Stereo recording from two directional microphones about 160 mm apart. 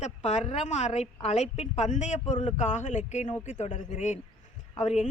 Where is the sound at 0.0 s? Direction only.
45° left (ahead or behind).